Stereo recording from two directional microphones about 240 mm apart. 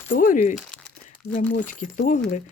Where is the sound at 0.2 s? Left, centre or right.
Left.